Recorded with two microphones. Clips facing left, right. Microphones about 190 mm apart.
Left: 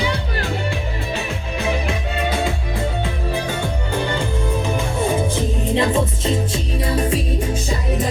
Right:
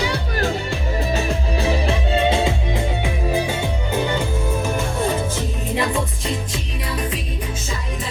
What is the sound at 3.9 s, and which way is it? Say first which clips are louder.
Music: right 1 dB; 10° right (ahead or behind).